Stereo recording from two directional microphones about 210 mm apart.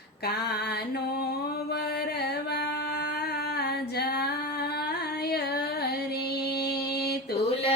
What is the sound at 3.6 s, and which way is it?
Female singing, 50° left (ahead or behind).